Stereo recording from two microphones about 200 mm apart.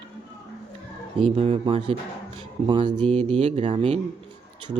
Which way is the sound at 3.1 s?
35° right (ahead or behind).